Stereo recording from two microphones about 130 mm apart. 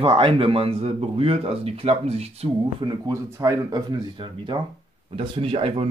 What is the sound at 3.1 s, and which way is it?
Speech, 25° right (ahead or behind).